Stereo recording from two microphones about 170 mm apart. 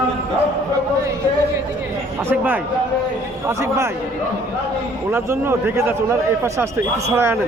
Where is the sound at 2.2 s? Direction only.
10° right (ahead or behind).